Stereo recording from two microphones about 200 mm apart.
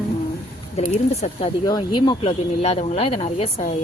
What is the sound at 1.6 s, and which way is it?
Speech, 20° left (ahead or behind).